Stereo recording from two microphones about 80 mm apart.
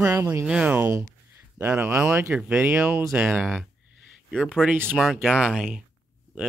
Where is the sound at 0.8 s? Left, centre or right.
Right.